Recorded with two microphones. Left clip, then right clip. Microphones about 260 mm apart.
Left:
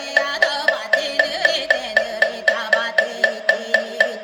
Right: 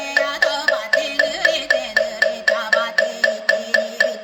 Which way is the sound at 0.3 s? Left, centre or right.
Centre.